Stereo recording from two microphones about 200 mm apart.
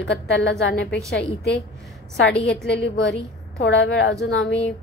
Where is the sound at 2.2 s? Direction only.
60° left (ahead or behind).